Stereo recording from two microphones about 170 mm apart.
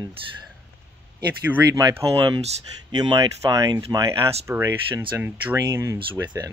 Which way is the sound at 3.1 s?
20° right (ahead or behind).